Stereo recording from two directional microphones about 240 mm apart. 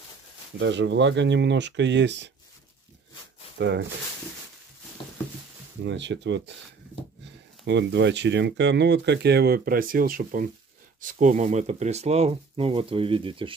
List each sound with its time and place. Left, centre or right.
0.6 s speech: right
3.5 s speech: right
5.9 s speech: right
7.6 s speech: right